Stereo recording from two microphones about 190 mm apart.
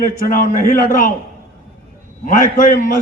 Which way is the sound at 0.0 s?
45° left (ahead or behind).